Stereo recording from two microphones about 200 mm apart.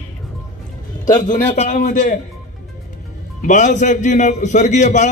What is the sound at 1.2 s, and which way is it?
Speech, 40° left (ahead or behind).